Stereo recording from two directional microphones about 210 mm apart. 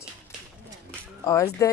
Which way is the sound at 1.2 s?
15° left (ahead or behind).